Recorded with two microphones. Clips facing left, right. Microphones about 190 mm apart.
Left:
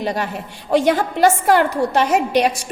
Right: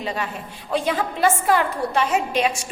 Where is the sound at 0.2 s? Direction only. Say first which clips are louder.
Left 4 dB; 75° left (ahead or behind).